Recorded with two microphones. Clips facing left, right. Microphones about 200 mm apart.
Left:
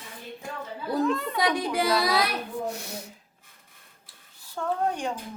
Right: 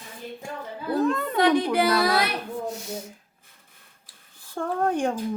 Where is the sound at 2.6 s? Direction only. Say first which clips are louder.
Right 2 dB; 65° left (ahead or behind).